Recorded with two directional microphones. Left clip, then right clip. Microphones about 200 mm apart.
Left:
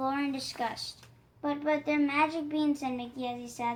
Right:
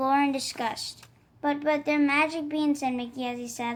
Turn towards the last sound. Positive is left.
turn(degrees=-40)  # may be behind; listen again after turning